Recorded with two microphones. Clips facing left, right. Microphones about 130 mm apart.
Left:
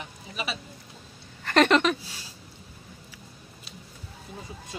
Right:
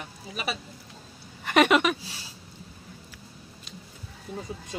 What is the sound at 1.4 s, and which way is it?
Speech, 10° right (ahead or behind).